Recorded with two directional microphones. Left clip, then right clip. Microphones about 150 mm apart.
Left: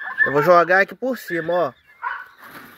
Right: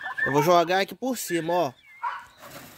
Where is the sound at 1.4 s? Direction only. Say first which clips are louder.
Left 5 dB; 25° right (ahead or behind).